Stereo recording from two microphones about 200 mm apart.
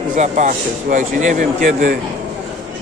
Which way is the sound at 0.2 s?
40° right (ahead or behind).